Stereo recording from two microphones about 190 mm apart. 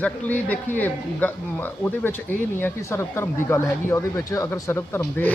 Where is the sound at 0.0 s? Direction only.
10° left (ahead or behind).